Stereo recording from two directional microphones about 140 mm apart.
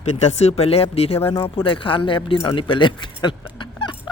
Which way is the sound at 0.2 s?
50° left (ahead or behind).